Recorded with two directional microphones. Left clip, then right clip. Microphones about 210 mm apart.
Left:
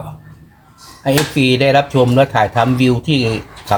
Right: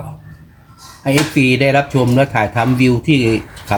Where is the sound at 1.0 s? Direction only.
5° left (ahead or behind).